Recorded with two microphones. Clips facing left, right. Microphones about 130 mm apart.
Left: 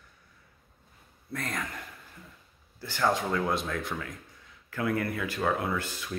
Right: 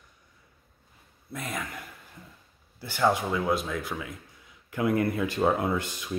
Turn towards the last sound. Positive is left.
turn(degrees=-20)  # may be behind; listen again after turning